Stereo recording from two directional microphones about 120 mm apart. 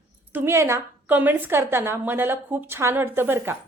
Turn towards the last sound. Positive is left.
turn(degrees=-20)  # may be behind; listen again after turning